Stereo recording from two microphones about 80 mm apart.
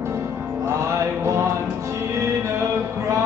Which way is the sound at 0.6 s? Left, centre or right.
Right.